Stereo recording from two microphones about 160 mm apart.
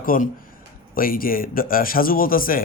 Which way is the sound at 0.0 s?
60° left (ahead or behind).